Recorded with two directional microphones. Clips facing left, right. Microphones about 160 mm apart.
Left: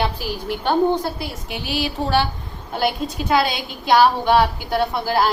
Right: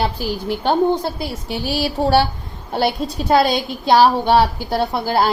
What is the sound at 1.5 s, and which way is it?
A woman's voice, 35° right (ahead or behind).